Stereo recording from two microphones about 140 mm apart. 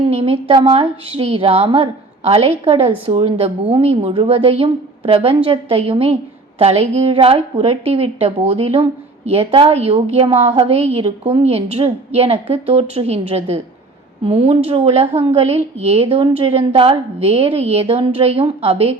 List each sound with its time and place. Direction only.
0.1 s a woman's voice: 45° right (ahead or behind)